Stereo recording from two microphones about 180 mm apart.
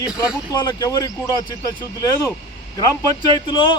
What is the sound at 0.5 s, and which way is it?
Speech, 25° left (ahead or behind).